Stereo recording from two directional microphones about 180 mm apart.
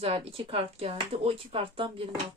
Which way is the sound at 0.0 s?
35° right (ahead or behind).